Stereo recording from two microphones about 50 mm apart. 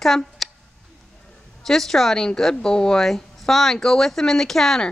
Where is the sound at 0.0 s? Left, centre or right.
Centre.